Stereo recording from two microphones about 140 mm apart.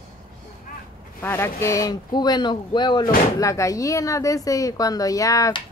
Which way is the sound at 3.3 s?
20° left (ahead or behind).